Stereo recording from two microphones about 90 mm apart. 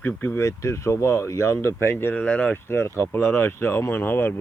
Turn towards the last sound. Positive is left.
turn(degrees=25)  # may be behind; listen again after turning